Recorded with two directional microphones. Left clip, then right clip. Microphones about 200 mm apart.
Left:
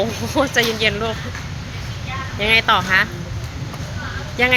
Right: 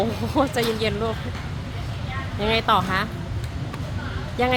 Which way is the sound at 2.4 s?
15° right (ahead or behind).